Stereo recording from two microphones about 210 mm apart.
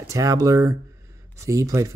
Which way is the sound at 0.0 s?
15° right (ahead or behind).